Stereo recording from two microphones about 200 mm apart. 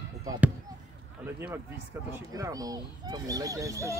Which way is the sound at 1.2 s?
10° right (ahead or behind).